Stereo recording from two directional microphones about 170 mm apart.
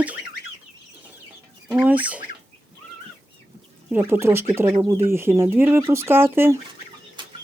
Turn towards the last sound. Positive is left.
turn(degrees=-15)  # may be behind; listen again after turning